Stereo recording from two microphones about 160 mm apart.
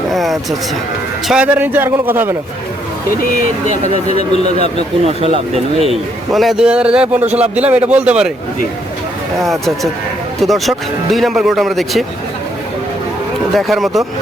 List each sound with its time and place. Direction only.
0.1 s a man's voice: centre (ahead or behind)
5.0 s speech: 40° right (ahead or behind)
5.9 s a man's voice: centre (ahead or behind)
9.4 s speech: centre (ahead or behind)
13.6 s speech: centre (ahead or behind)